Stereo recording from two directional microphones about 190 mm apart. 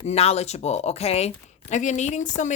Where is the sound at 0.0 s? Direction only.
35° left (ahead or behind).